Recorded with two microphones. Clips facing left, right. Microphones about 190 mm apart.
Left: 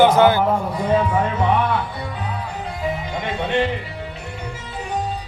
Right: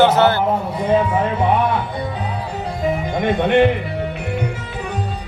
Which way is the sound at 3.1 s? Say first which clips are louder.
Right 8 dB; 55° right (ahead or behind).